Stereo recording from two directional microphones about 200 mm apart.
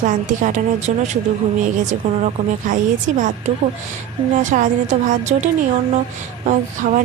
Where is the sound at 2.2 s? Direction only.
35° right (ahead or behind).